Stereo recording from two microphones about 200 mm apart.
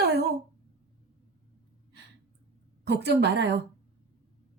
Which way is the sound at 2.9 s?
55° right (ahead or behind).